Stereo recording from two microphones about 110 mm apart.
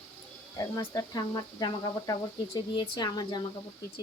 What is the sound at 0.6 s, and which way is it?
Speech, 35° left (ahead or behind).